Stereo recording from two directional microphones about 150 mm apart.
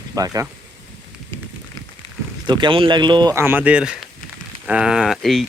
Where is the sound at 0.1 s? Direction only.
25° right (ahead or behind).